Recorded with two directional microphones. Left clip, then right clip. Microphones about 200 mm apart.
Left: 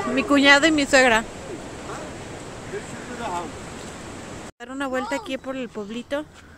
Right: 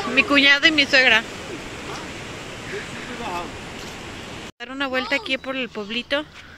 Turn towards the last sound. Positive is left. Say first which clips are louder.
# right 4 dB
turn(degrees=5)  # may be behind; listen again after turning